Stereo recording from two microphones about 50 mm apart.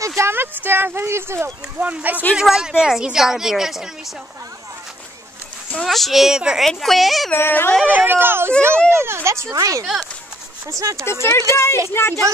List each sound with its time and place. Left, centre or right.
0.2 s speech: right
1.0 s speech: right
1.8 s speech: right
2.5 s a woman's voice: centre
5.9 s a woman's voice: centre
6.2 s a woman's voice: centre
6.7 s a woman's voice: centre
7.3 s a sound: left
7.8 s speech: right
11.1 s speech: left
11.9 s a sound: left